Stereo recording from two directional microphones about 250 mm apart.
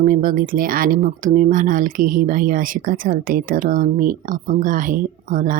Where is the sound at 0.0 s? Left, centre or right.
Right.